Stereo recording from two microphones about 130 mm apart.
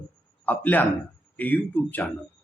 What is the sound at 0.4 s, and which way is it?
Speech, 15° left (ahead or behind).